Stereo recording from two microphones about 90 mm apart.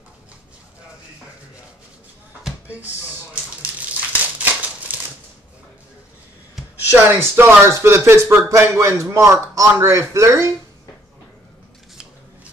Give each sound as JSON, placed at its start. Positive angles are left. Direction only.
{"t": 4.4, "sound": "scissors", "side_deg": -15}
{"t": 6.9, "sound": "speech", "side_deg": -25}